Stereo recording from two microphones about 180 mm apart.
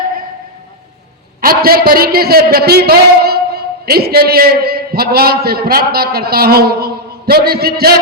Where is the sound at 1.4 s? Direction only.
55° right (ahead or behind).